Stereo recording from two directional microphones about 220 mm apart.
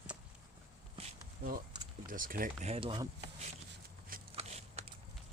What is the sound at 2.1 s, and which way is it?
Speech, 40° right (ahead or behind).